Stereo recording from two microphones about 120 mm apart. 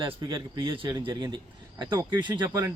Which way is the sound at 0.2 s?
40° right (ahead or behind).